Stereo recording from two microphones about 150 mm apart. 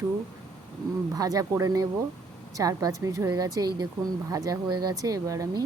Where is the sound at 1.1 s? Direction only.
25° right (ahead or behind).